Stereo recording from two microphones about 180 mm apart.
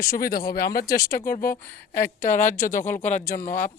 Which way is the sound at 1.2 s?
45° left (ahead or behind).